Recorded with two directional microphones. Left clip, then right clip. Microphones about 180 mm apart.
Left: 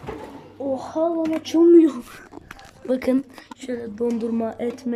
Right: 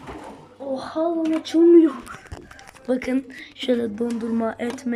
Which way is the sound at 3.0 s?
25° left (ahead or behind).